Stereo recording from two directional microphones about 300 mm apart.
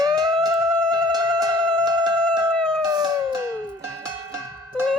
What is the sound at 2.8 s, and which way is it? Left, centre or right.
Howl, centre.